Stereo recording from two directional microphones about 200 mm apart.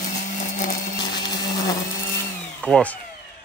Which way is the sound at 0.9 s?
20° left (ahead or behind).